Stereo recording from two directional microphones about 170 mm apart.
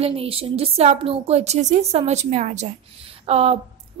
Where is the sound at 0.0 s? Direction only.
35° right (ahead or behind).